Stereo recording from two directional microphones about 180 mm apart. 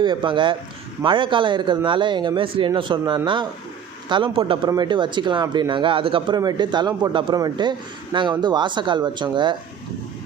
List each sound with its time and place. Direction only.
0.0 s speech: 25° right (ahead or behind)